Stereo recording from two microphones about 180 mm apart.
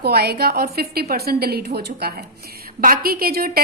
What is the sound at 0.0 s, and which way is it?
A woman's voice, 60° right (ahead or behind).